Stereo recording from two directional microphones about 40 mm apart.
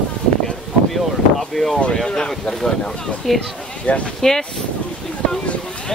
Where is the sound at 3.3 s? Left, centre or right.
Centre.